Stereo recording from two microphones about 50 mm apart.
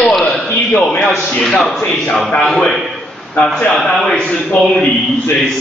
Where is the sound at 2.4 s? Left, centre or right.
Centre.